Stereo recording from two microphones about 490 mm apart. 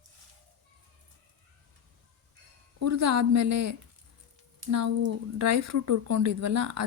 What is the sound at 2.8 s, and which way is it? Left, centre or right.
Speech, right.